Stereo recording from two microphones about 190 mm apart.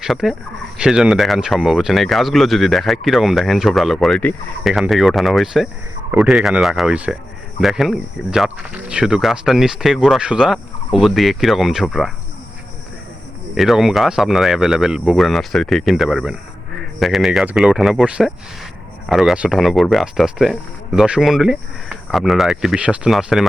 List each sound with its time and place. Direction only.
0.0 s speech: centre (ahead or behind)
13.6 s speech: centre (ahead or behind)